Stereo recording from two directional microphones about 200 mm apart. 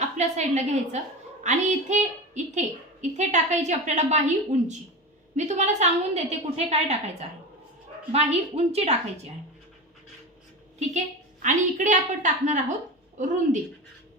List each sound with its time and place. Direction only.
0.0 s a woman's voice: 35° right (ahead or behind)
5.4 s a woman's voice: 35° right (ahead or behind)
11.4 s a woman's voice: 40° right (ahead or behind)